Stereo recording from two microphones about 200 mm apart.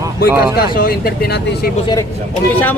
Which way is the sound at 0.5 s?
50° left (ahead or behind).